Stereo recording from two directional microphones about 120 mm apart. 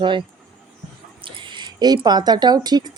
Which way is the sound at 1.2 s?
40° right (ahead or behind).